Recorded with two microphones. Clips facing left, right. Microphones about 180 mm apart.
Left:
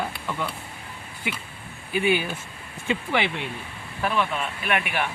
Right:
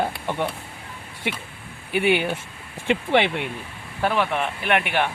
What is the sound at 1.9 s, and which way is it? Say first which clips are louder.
Speech: right 3 dB; 70° right (ahead or behind).